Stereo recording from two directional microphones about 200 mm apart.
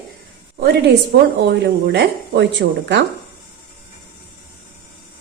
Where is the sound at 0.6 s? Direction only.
50° right (ahead or behind).